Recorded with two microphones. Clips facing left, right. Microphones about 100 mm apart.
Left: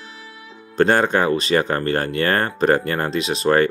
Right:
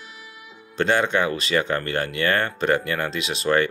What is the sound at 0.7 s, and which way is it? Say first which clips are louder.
Speech: left 4 dB; 45° left (ahead or behind).